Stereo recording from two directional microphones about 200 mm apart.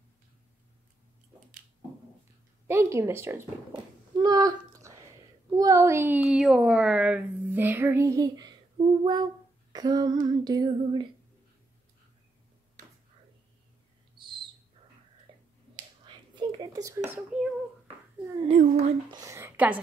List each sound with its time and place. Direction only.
2.7 s speech: 15° right (ahead or behind)
10.2 s female singing: 20° right (ahead or behind)
16.1 s whispering: 20° right (ahead or behind); by 17.5 s 5° right (ahead or behind)
18.5 s speech: 35° right (ahead or behind)
19.0 s speech: 15° right (ahead or behind)